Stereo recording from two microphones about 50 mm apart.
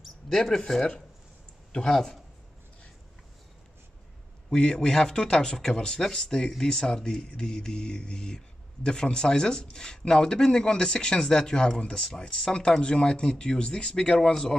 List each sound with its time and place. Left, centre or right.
0.3 s speech: centre
4.5 s speech: centre